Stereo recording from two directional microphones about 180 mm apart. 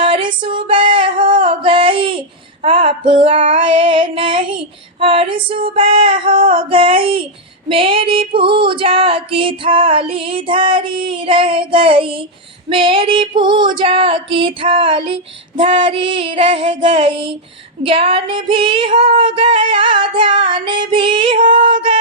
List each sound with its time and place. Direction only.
0.0 s music: 30° right (ahead or behind)
1.5 s a sound: 30° right (ahead or behind)
2.6 s female singing: 30° right (ahead or behind)